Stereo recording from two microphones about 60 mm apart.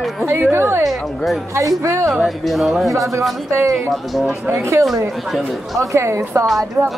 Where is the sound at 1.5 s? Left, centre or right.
Right.